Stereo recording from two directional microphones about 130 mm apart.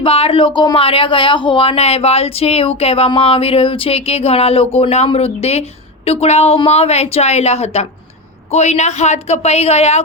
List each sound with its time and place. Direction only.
0.0 s a woman's voice: 45° left (ahead or behind)